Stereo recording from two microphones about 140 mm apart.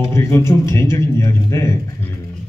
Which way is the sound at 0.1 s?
20° left (ahead or behind).